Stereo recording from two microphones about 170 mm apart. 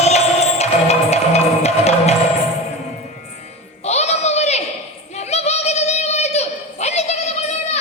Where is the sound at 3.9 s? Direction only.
40° left (ahead or behind).